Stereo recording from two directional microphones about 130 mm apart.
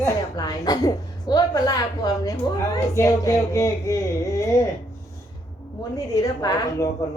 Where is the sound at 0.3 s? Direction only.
30° left (ahead or behind).